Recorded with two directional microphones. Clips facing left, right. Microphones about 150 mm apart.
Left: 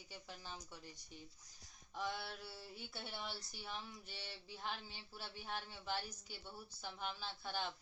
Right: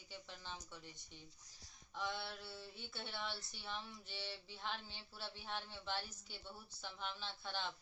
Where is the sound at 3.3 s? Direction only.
40° left (ahead or behind).